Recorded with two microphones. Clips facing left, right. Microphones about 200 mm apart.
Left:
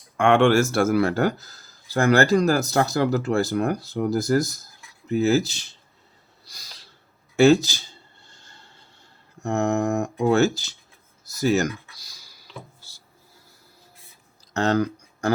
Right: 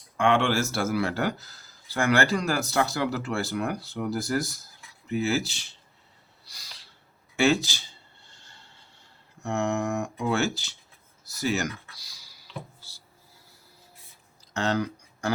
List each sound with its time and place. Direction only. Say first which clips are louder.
0.2 s speech: left 6 dB; 50° left (ahead or behind)
6.5 s a sound: left 2 dB; 45° left (ahead or behind)
7.3 s speech: left 7 dB; 40° left (ahead or behind)
8.3 s train: left 2 dB; 45° left (ahead or behind)
9.4 s speech: left 5 dB; 40° left (ahead or behind)
14.5 s a sound: left 5 dB; 45° left (ahead or behind)